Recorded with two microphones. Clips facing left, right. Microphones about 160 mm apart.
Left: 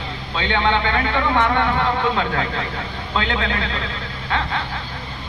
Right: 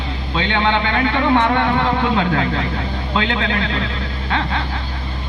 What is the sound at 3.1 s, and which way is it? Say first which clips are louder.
Speech: right 2 dB; 30° right (ahead or behind).